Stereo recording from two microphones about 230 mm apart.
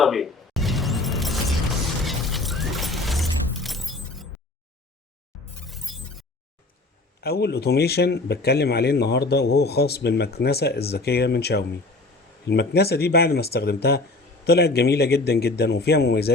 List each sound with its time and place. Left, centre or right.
0.0 s a sound: centre
5.6 s shatter: centre
7.2 s a man's voice: left